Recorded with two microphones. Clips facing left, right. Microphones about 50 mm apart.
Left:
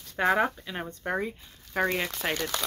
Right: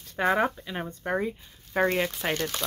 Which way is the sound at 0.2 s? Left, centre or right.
Centre.